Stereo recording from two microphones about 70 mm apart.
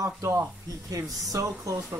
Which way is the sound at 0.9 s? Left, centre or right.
Right.